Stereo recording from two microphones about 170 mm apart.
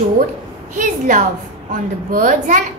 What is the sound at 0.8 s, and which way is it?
A woman's voice, 50° right (ahead or behind).